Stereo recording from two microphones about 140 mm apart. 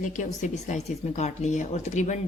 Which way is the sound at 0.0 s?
60° left (ahead or behind).